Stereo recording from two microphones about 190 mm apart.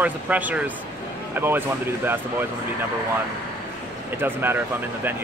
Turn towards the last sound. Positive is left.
turn(degrees=-10)  # may be behind; listen again after turning